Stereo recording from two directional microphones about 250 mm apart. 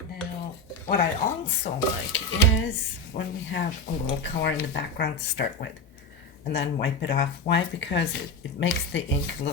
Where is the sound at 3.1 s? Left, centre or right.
Left.